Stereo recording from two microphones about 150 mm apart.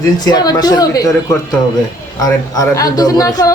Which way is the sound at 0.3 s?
25° left (ahead or behind).